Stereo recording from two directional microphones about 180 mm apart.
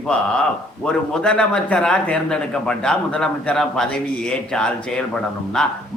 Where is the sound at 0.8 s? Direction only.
5° left (ahead or behind).